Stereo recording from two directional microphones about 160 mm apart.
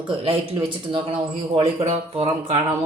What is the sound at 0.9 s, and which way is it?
Speech, 35° right (ahead or behind).